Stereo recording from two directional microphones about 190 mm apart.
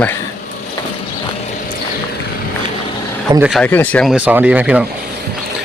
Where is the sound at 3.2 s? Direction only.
15° right (ahead or behind).